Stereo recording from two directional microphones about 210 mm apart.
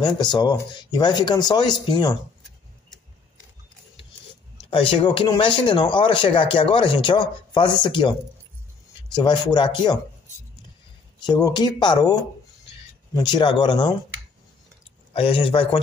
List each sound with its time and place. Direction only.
0.0 s speech: 20° left (ahead or behind)
4.6 s speech: 25° left (ahead or behind)
9.1 s speech: 20° left (ahead or behind)
11.2 s speech: 20° left (ahead or behind)
15.1 s speech: 25° left (ahead or behind)